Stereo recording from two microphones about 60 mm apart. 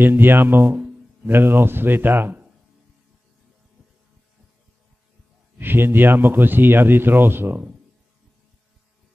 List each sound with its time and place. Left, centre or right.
0.0 s a man's voice: right
5.6 s a man's voice: right